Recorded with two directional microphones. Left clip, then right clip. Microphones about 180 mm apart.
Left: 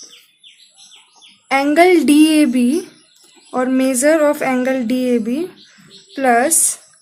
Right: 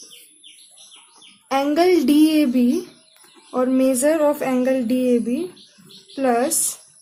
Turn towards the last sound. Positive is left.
turn(degrees=30)  # may be behind; listen again after turning